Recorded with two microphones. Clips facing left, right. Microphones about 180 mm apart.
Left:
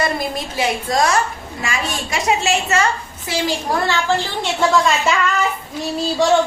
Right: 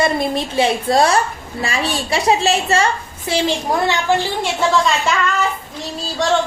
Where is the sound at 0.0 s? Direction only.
25° right (ahead or behind).